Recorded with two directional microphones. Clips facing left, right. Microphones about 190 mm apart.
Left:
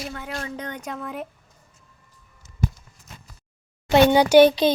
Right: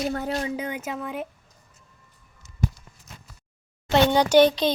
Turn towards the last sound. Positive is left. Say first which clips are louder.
# left 3 dB
turn(degrees=10)  # may be behind; listen again after turning